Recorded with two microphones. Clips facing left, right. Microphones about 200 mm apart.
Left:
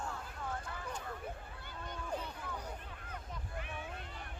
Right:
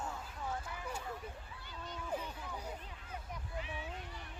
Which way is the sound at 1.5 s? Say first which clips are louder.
Left 1 dB; 55° left (ahead or behind).